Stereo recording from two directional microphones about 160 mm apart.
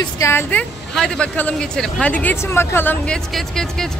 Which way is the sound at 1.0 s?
5° left (ahead or behind).